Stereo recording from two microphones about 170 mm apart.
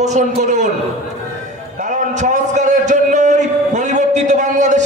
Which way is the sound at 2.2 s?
45° right (ahead or behind).